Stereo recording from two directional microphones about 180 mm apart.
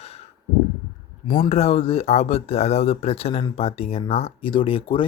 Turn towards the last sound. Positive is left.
turn(degrees=30)  # may be behind; listen again after turning